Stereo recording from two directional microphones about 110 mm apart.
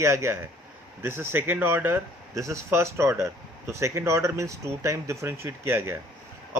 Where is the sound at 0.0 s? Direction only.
25° right (ahead or behind).